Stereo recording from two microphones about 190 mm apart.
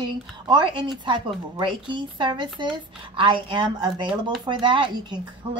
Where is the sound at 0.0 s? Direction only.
25° right (ahead or behind).